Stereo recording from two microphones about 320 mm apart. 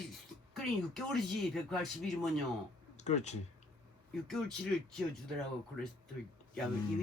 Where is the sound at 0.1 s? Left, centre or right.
Centre.